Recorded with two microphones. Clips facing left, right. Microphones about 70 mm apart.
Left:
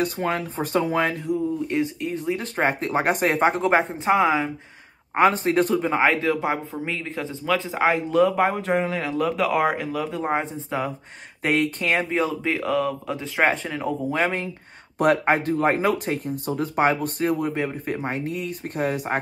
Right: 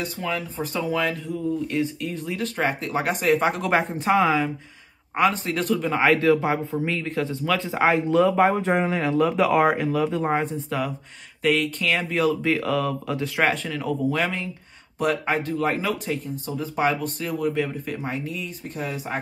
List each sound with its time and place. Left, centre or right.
0.0 s speech: left
1.7 s speech: left
2.5 s speech: left
3.6 s speech: centre
5.1 s speech: left
5.8 s speech: left
6.1 s speech: centre
10.4 s speech: left
11.4 s speech: left
12.1 s speech: left
13.5 s speech: left
15.0 s speech: left